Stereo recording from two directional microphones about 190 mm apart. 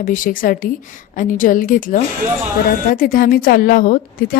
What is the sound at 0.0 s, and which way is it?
A woman's voice, 45° left (ahead or behind).